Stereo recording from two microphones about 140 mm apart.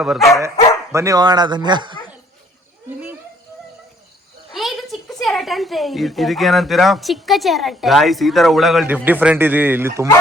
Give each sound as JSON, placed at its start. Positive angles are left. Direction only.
{"t": 0.0, "sound": "a woman's voice", "side_deg": -5}
{"t": 0.9, "sound": "speech", "side_deg": -25}
{"t": 4.5, "sound": "a woman's voice", "side_deg": 0}
{"t": 9.0, "sound": "speech", "side_deg": -15}